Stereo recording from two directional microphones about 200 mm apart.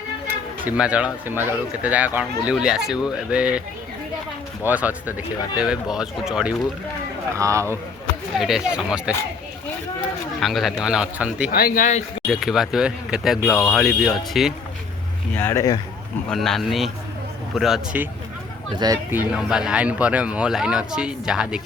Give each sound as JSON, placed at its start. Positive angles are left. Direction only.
{"t": 0.3, "sound": "speech", "side_deg": -5}
{"t": 4.6, "sound": "speech", "side_deg": -5}
{"t": 7.3, "sound": "speech", "side_deg": -15}
{"t": 8.4, "sound": "speech", "side_deg": 0}
{"t": 11.5, "sound": "speech", "side_deg": 45}
{"t": 12.3, "sound": "speech", "side_deg": 0}
{"t": 15.4, "sound": "speech", "side_deg": 10}
{"t": 16.3, "sound": "speech", "side_deg": 0}
{"t": 19.1, "sound": "speech", "side_deg": -5}